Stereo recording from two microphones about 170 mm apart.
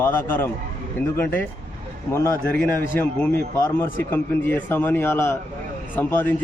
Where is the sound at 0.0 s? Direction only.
15° left (ahead or behind).